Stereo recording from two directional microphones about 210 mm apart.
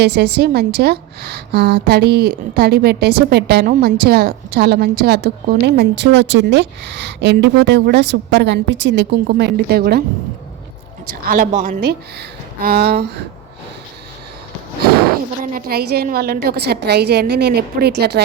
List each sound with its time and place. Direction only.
0.0 s a woman's voice: 50° right (ahead or behind)
11.3 s a woman's voice: 40° right (ahead or behind)
15.5 s a woman's voice: 45° right (ahead or behind)